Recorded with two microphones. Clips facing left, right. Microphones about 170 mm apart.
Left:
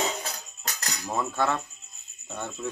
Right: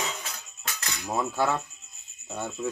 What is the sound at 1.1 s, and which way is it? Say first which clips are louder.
Cricket: right 1 dB; 10° right (ahead or behind).